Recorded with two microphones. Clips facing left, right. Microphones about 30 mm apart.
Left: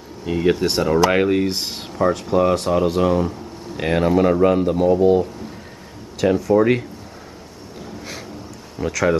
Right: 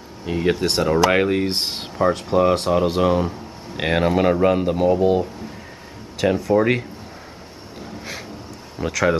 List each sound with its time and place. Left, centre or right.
0.2 s speech: centre
1.5 s speech: right
7.8 s a sound: centre
8.7 s speech: centre